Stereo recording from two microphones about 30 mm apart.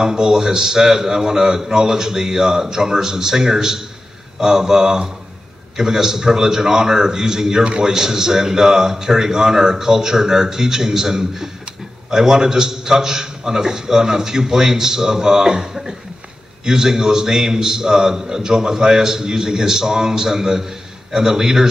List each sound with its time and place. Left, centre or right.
0.0 s a man's voice: right